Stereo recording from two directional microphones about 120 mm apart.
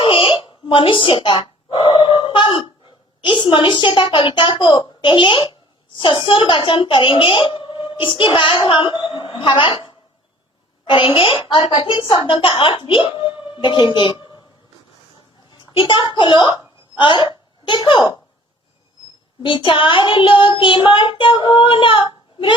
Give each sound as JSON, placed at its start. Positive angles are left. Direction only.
{"t": 0.0, "sound": "a sound", "side_deg": 45}
{"t": 3.2, "sound": "a woman's voice", "side_deg": 40}
{"t": 10.8, "sound": "child singing", "side_deg": 45}
{"t": 11.7, "sound": "speech", "side_deg": 40}
{"t": 15.5, "sound": "a child's voice", "side_deg": 40}
{"t": 19.4, "sound": "child singing", "side_deg": 45}